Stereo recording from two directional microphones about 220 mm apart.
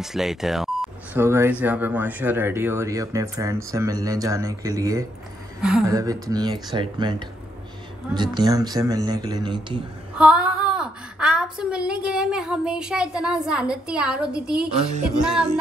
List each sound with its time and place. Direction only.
0.0 s speech: centre (ahead or behind); by 9.8 s 20° right (ahead or behind)
10.1 s a woman's voice: 5° right (ahead or behind)
15.2 s music: 5° right (ahead or behind)